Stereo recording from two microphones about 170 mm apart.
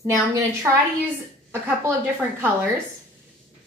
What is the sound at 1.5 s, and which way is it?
Speech, 15° right (ahead or behind).